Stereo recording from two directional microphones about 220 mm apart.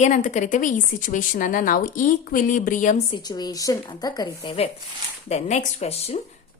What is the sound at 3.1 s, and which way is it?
A woman's voice, 20° left (ahead or behind).